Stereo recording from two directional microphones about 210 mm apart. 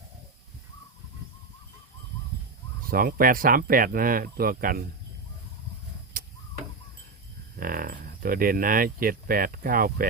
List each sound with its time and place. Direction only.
2.9 s speech: 45° right (ahead or behind)
6.2 s tick-tock: 45° right (ahead or behind)
7.5 s speech: 40° right (ahead or behind)